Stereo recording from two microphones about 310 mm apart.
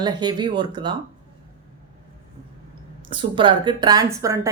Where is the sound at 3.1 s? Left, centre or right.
Centre.